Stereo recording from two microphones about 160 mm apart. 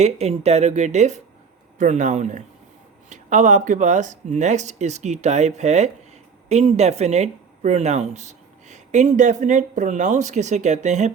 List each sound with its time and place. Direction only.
0.0 s speech: 40° right (ahead or behind)